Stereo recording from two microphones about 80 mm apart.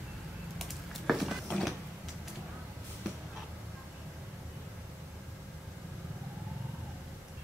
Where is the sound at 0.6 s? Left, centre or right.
Centre.